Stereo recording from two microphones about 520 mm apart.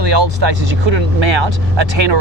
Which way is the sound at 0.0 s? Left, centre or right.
Right.